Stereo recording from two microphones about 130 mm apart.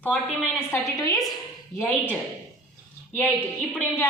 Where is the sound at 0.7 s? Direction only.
25° left (ahead or behind).